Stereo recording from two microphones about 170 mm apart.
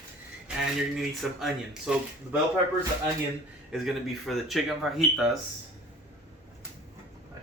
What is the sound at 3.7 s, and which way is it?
Speech, centre (ahead or behind).